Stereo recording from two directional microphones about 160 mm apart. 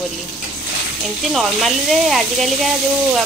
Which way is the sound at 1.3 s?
Centre (ahead or behind).